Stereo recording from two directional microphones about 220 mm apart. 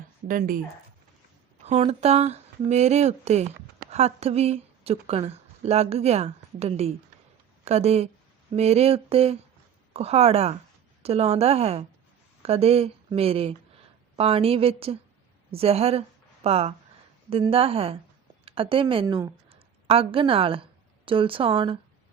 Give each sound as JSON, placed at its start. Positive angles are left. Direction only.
{"t": 0.3, "sound": "speech", "side_deg": -40}
{"t": 1.6, "sound": "a woman's voice", "side_deg": -30}